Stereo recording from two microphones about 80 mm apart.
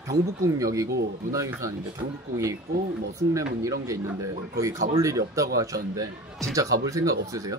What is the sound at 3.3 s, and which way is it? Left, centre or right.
Speech, right.